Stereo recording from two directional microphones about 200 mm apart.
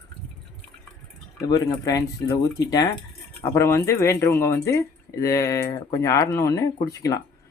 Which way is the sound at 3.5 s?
15° left (ahead or behind).